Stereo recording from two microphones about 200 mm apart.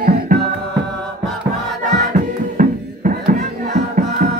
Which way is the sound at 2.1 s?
40° right (ahead or behind).